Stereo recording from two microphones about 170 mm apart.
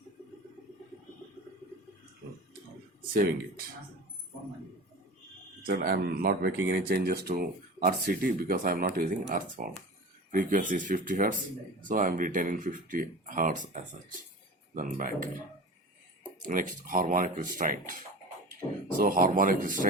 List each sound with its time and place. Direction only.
5.6 s speech: 60° right (ahead or behind)
16.5 s speech: 55° right (ahead or behind)
18.9 s speech: 55° right (ahead or behind)